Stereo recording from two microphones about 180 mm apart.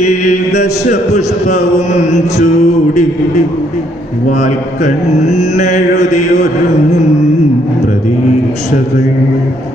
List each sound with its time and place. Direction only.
0.6 s music: 40° left (ahead or behind)